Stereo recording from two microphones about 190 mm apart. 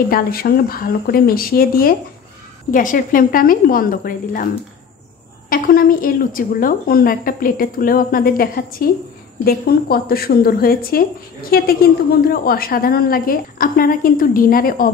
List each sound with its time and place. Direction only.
0.1 s a woman's voice: 50° left (ahead or behind)
5.5 s a woman's voice: 50° left (ahead or behind)